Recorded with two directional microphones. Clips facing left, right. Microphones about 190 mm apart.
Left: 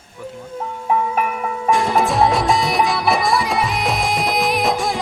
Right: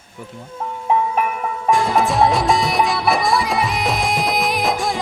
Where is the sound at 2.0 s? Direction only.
Centre (ahead or behind).